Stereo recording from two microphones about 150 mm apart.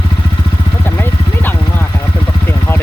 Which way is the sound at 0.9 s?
15° left (ahead or behind).